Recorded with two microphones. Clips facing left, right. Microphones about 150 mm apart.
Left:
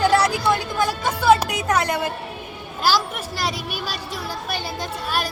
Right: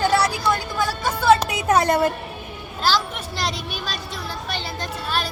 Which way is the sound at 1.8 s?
45° right (ahead or behind).